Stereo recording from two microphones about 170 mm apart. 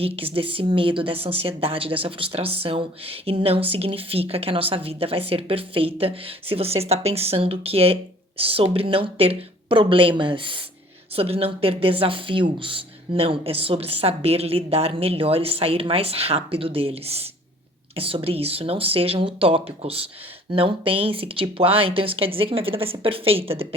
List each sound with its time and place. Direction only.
0.0 s speech: 35° right (ahead or behind)